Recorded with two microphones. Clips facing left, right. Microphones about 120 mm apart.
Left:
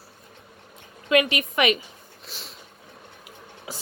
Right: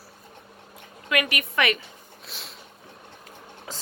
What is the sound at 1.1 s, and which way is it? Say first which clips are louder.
Speech: left 5 dB; 25° left (ahead or behind).